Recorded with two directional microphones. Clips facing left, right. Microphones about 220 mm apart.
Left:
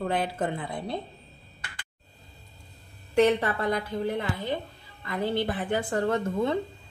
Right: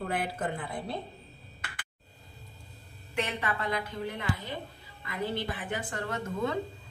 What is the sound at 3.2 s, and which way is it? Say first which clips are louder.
A woman's voice: left 11 dB; 35° left (ahead or behind).